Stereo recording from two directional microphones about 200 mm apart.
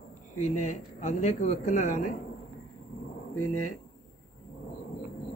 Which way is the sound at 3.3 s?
90° left.